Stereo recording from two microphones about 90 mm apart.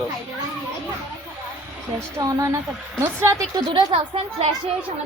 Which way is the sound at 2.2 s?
40° right (ahead or behind).